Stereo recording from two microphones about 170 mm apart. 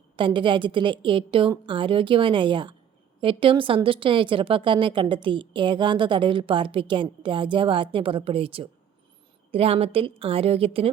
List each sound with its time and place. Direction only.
0.2 s a woman's voice: 30° right (ahead or behind)